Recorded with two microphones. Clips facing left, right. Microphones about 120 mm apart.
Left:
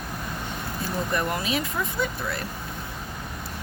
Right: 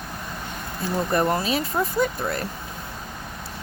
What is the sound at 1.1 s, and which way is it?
Speech, 35° right (ahead or behind).